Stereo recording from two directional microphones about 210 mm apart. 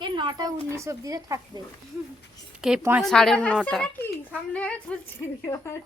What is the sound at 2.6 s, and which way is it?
A woman's voice, 5° right (ahead or behind).